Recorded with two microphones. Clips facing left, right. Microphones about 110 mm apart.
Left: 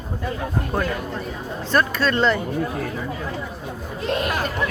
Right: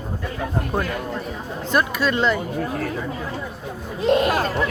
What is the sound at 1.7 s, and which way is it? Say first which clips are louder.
Speech: left 1 dB; 10° right (ahead or behind).